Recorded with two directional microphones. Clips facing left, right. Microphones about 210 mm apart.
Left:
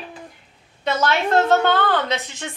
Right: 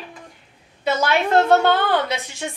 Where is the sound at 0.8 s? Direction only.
10° right (ahead or behind).